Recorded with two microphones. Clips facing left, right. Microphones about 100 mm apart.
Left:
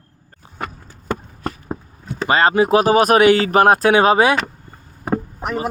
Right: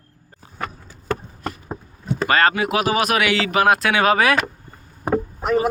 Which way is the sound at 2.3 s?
25° left (ahead or behind).